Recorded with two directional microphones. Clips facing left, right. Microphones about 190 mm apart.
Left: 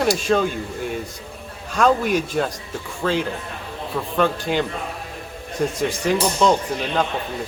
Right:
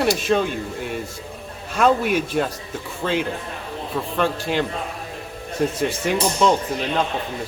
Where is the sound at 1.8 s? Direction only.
5° right (ahead or behind).